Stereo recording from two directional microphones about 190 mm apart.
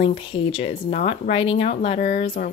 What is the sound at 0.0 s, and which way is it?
Speech, 30° left (ahead or behind).